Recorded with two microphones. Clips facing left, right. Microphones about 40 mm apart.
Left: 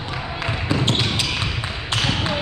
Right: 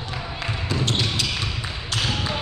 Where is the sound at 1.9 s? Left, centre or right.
Left.